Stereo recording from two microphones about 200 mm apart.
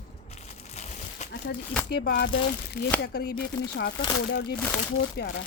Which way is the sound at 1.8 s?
55° left (ahead or behind).